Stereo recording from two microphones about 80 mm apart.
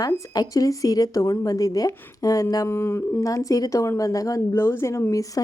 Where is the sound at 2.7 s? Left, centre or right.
Left.